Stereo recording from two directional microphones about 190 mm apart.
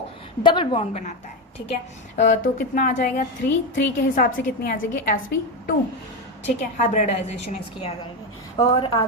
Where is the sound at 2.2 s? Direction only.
40° left (ahead or behind).